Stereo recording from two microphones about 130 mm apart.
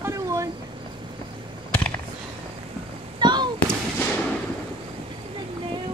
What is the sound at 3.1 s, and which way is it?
Fireworks, 35° right (ahead or behind).